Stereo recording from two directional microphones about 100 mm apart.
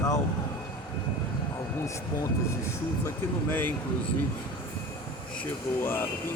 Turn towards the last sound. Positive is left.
turn(degrees=25)  # may be behind; listen again after turning